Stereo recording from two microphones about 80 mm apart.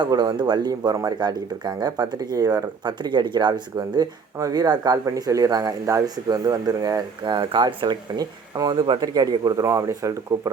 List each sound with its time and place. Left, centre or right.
0.1 s speech: right
0.7 s speech: right
2.8 s speech: right
5.0 s speech: right
7.3 s speech: right
9.4 s speech: right